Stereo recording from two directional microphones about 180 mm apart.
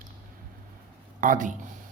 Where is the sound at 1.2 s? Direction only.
45° right (ahead or behind).